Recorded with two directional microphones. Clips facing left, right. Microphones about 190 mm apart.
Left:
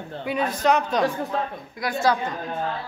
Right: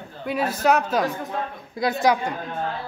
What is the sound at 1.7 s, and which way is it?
Speech, 25° right (ahead or behind).